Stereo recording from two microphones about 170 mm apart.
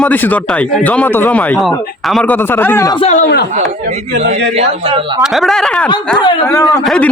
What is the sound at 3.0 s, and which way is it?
Speech, 45° left (ahead or behind).